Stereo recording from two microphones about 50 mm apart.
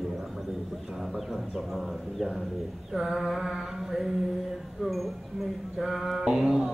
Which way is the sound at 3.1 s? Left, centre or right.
Centre.